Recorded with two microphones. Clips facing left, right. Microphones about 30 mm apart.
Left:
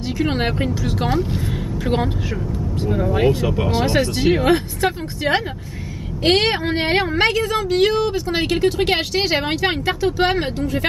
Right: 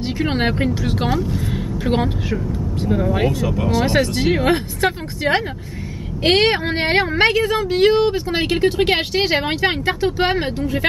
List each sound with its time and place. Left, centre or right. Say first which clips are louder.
0.2 s a woman's voice: right 1 dB; centre
3.3 s speech: left 2 dB; left
3.8 s a woman's voice: left 1 dB; centre
8.7 s a woman's voice: right 1 dB; centre